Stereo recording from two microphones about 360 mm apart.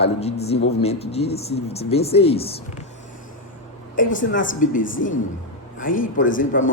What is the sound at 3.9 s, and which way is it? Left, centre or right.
Speech, left.